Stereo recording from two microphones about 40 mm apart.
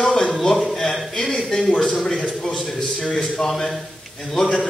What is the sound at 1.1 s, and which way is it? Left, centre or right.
A man's voice, centre.